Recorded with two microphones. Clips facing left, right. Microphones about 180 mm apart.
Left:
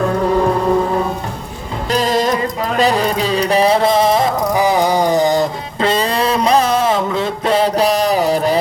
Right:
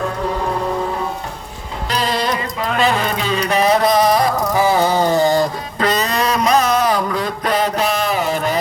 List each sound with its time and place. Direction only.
1.9 s music: 45° left (ahead or behind)